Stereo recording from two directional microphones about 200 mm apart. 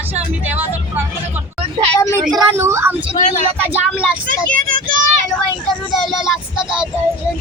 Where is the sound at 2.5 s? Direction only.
15° right (ahead or behind).